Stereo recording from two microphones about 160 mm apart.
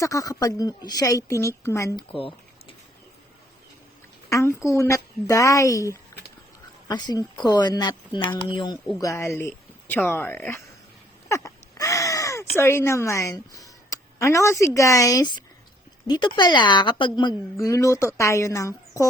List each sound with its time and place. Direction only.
0.0 s a woman's voice: 20° left (ahead or behind)
2.1 s a sound: 35° left (ahead or behind)
4.3 s a woman's voice: 20° left (ahead or behind)
9.0 s a woman's voice: 15° left (ahead or behind)